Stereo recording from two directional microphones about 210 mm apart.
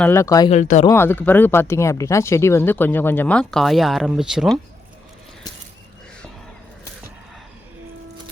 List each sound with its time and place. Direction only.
0.0 s speech: 10° left (ahead or behind)
0.5 s speech: 35° left (ahead or behind)
0.9 s speech: 10° left (ahead or behind)